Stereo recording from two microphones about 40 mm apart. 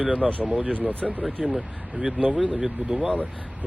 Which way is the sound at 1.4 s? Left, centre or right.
Right.